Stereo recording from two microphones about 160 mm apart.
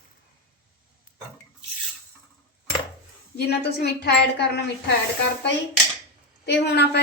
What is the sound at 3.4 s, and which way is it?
Speech, 90° left.